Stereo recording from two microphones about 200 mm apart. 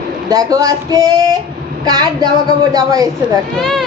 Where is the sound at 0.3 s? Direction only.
15° right (ahead or behind).